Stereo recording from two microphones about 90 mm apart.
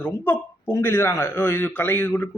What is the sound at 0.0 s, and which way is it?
A man's voice, 25° left (ahead or behind).